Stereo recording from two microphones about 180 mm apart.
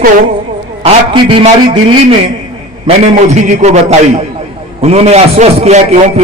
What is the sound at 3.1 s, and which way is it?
Speech, 40° right (ahead or behind).